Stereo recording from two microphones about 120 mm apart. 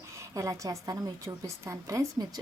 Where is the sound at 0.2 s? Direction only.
25° right (ahead or behind).